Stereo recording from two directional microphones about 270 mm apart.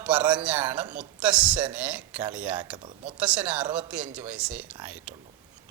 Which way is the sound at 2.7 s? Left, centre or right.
Centre.